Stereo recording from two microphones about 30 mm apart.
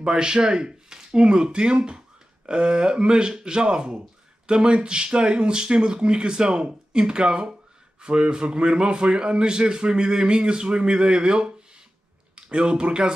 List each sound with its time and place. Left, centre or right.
0.0 s a man's voice: right